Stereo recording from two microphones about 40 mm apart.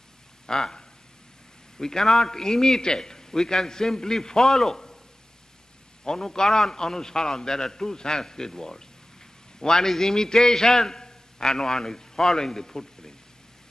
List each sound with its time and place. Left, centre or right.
0.5 s a man's voice: centre
6.0 s a man's voice: centre